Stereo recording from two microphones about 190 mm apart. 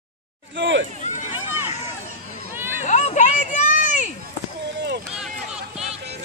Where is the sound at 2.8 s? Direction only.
35° left (ahead or behind).